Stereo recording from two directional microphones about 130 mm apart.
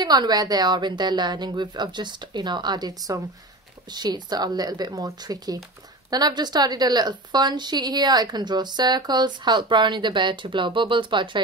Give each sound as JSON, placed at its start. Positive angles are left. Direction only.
{"t": 0.0, "sound": "a woman's voice", "side_deg": -30}